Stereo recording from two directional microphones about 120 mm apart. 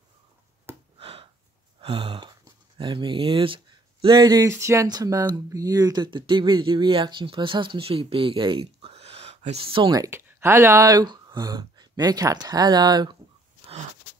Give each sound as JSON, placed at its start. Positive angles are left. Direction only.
{"t": 0.9, "sound": "a sound", "side_deg": -55}
{"t": 1.8, "sound": "speech", "side_deg": -45}
{"t": 9.9, "sound": "speech", "side_deg": -20}